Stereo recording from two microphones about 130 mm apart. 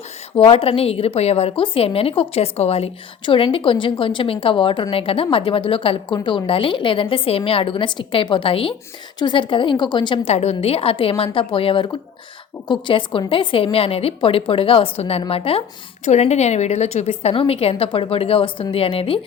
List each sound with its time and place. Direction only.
0.3 s a woman's voice: 45° left (ahead or behind)
10.2 s a woman's voice: 55° left (ahead or behind)
16.0 s a woman's voice: 60° left (ahead or behind)